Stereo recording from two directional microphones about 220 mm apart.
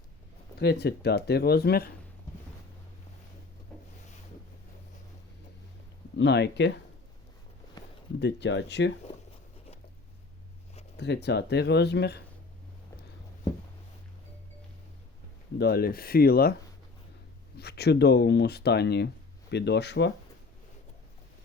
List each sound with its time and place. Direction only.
0.6 s speech: 50° left (ahead or behind)
6.1 s speech: 50° left (ahead or behind)
7.8 s a sound: 20° left (ahead or behind)
8.2 s speech: 50° left (ahead or behind)
10.9 s speech: 50° left (ahead or behind)
15.5 s speech: 45° left (ahead or behind)
17.6 s speech: 45° left (ahead or behind)